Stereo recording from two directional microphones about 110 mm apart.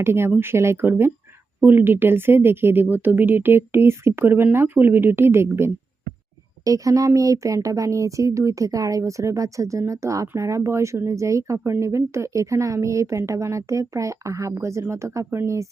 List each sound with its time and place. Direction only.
0.0 s speech: 20° right (ahead or behind)